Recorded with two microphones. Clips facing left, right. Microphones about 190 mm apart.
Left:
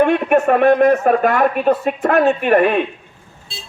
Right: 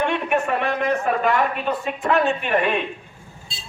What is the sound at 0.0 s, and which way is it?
Speech, 45° left (ahead or behind).